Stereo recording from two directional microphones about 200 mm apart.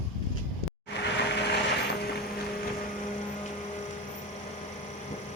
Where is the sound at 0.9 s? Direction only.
60° left (ahead or behind).